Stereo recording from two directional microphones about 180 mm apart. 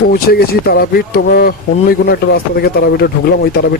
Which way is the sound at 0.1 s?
60° left (ahead or behind).